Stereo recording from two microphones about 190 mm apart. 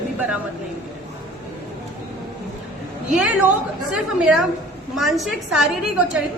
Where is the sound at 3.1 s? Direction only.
10° right (ahead or behind).